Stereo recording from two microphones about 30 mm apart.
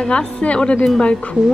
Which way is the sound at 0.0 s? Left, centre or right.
Left.